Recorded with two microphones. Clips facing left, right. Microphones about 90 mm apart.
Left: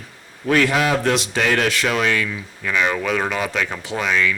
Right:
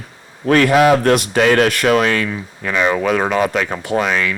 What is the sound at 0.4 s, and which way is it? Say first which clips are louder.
Speech: right 6 dB; 50° right (ahead or behind).